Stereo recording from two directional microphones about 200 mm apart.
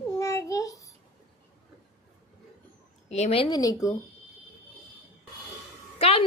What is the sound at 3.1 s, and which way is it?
Speech, 35° left (ahead or behind).